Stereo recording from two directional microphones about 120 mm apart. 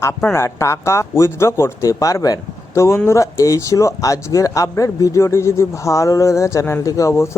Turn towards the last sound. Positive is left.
turn(degrees=25)  # may be behind; listen again after turning